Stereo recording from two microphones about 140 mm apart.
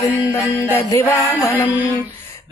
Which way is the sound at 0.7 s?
15° left (ahead or behind).